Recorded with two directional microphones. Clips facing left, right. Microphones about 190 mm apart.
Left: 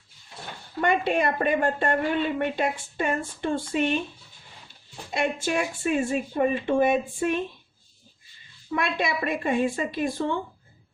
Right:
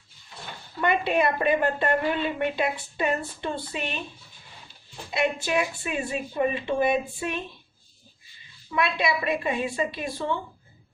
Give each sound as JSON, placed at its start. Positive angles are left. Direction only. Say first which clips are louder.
{"t": 0.8, "sound": "a woman's voice", "louder": "even", "side_deg": 45}
{"t": 5.1, "sound": "a woman's voice", "louder": "right 1 dB", "side_deg": 45}
{"t": 8.7, "sound": "a woman's voice", "louder": "right 1 dB", "side_deg": 45}